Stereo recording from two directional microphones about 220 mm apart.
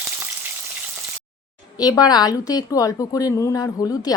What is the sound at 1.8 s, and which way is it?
A woman's voice, 15° left (ahead or behind).